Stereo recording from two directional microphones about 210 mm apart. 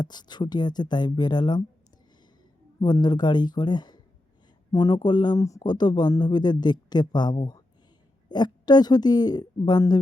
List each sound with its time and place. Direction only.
0.0 s speech: 20° left (ahead or behind)
2.8 s speech: 20° left (ahead or behind)